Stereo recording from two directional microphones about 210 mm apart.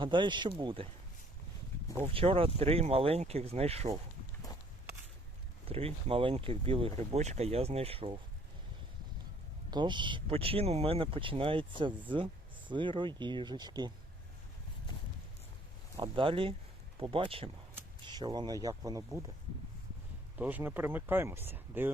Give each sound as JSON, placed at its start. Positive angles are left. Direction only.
{"t": 0.0, "sound": "speech", "side_deg": -25}
{"t": 2.0, "sound": "speech", "side_deg": -25}
{"t": 5.6, "sound": "speech", "side_deg": -25}
{"t": 9.6, "sound": "speech", "side_deg": -20}
{"t": 16.0, "sound": "speech", "side_deg": -25}
{"t": 20.4, "sound": "speech", "side_deg": -10}